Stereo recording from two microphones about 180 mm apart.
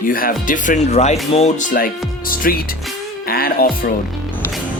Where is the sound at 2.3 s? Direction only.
50° left (ahead or behind).